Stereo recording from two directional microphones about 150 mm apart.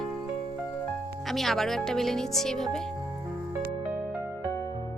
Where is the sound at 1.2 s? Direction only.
Centre (ahead or behind).